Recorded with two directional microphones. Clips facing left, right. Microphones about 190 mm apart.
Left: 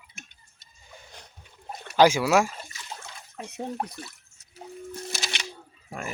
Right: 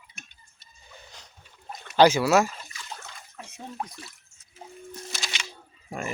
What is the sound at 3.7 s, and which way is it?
Speech, 70° left (ahead or behind).